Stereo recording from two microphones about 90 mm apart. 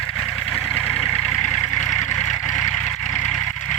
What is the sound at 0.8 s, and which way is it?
Vehicle, 20° left (ahead or behind).